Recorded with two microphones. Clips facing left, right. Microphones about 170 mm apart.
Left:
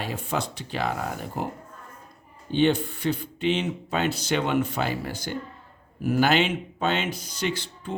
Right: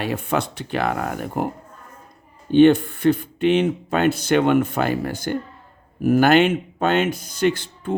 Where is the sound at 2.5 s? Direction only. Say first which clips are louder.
Right 9 dB; 55° right (ahead or behind).